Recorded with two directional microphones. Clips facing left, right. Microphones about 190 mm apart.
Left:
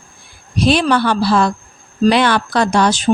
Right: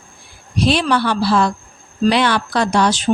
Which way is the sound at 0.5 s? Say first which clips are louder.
Left 2 dB; 50° left (ahead or behind).